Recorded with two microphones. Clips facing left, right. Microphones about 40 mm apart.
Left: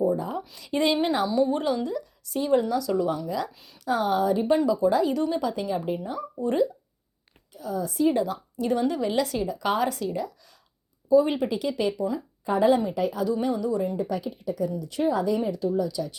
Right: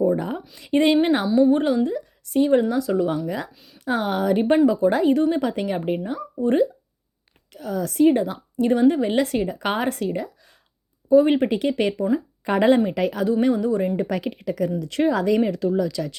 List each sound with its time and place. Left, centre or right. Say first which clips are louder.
0.0 s a sound: right 4 dB; right
0.6 s speech: right 6 dB; right
3.5 s speech: right 1 dB; centre
3.8 s speech: right 1 dB; right
6.4 s speech: right 5 dB; right
7.5 s a woman's voice: right 4 dB; right
8.0 s speech: right 6 dB; right
12.5 s a woman's voice: right 4 dB; right
13.4 s a woman's voice: right 5 dB; right
14.8 s speech: right 4 dB; right